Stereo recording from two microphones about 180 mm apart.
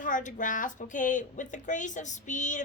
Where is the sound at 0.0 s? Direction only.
45° left (ahead or behind).